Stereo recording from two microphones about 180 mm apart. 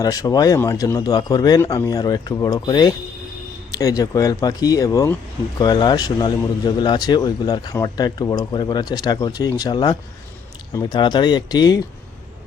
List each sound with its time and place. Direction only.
0.0 s a man's voice: 20° left (ahead or behind)